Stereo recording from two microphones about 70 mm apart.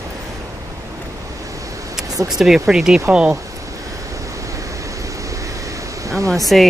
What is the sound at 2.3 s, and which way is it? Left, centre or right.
Speech, centre.